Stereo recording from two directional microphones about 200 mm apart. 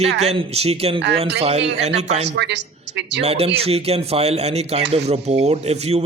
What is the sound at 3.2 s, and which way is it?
Speech, 30° right (ahead or behind).